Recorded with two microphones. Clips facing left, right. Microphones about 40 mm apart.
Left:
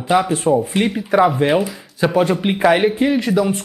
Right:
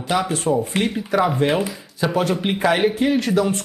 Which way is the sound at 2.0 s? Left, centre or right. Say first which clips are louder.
Left 4 dB; left.